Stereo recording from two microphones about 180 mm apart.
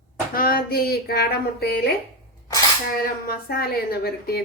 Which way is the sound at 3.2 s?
55° left (ahead or behind).